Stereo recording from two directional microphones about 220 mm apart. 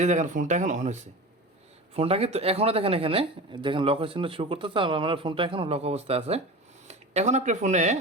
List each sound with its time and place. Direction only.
0.0 s speech: 35° right (ahead or behind)